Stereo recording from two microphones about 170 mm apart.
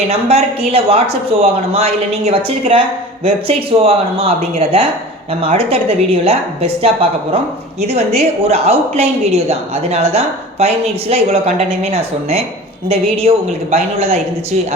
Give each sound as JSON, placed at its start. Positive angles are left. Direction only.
{"t": 0.1, "sound": "a woman's voice", "side_deg": -35}